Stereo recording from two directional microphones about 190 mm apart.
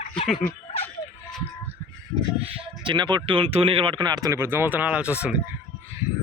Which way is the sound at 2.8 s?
25° right (ahead or behind).